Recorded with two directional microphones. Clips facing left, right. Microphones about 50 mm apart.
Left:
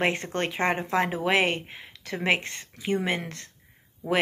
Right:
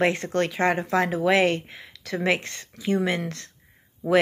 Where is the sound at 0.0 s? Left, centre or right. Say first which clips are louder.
Right 4 dB; centre.